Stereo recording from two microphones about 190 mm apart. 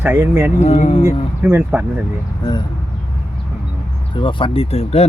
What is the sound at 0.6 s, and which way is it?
Speech, 35° left (ahead or behind).